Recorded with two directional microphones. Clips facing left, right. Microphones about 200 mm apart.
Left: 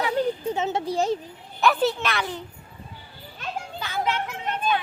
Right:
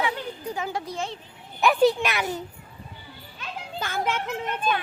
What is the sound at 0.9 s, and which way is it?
Speech, 40° left (ahead or behind).